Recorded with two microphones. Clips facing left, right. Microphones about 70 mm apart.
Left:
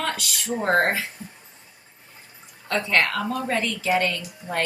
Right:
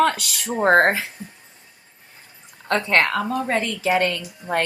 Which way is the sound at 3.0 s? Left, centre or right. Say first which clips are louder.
Right 3 dB; right.